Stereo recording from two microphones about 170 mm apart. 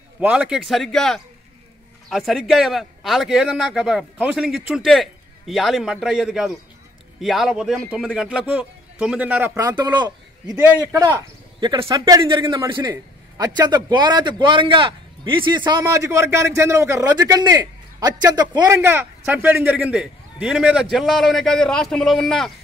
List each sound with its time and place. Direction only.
0.2 s a man's voice: 5° right (ahead or behind)
9.7 s a man's voice: 25° right (ahead or behind)
10.6 s a man's voice: 10° right (ahead or behind)
11.0 s speech: 20° right (ahead or behind)
11.7 s a man's voice: 30° right (ahead or behind)
15.8 s a man's voice: 15° right (ahead or behind); by 22.5 s centre (ahead or behind)